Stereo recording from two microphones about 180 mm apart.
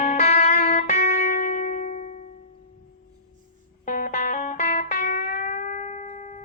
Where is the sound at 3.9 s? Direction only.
45° left (ahead or behind).